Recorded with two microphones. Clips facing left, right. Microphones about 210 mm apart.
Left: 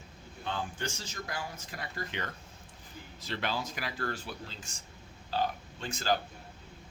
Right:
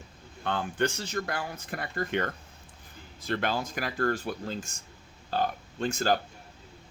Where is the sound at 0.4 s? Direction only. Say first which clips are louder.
Right 8 dB; 60° right (ahead or behind).